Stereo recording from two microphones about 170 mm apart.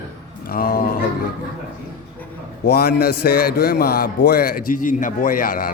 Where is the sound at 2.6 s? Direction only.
65° left (ahead or behind).